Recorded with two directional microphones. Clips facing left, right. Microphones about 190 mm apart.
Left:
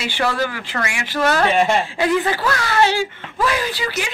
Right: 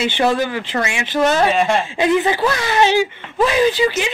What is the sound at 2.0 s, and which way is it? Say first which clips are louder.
Speech: right 3 dB; 20° right (ahead or behind).